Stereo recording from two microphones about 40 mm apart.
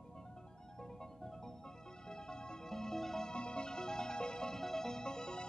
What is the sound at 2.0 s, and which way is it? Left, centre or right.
Music, centre.